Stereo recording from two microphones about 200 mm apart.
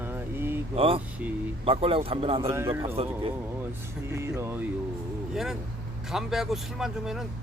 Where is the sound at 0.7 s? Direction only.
30° right (ahead or behind).